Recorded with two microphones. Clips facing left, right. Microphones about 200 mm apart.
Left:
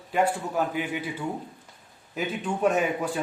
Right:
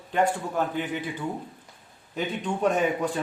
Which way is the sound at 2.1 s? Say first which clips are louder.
Even; 5° left (ahead or behind).